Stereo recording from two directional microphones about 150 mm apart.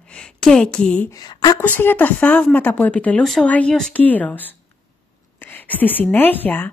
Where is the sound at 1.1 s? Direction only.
25° left (ahead or behind).